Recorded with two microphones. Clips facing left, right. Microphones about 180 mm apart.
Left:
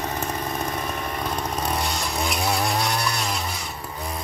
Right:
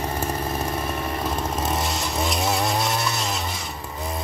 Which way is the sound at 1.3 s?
Centre (ahead or behind).